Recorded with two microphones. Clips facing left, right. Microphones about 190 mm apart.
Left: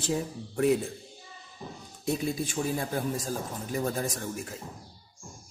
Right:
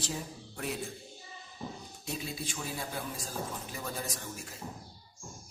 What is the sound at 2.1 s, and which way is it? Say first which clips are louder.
A man's voice: left 9 dB; 50° left (ahead or behind).